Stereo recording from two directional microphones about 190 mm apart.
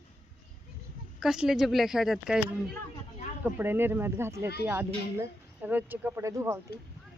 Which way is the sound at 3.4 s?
10° right (ahead or behind).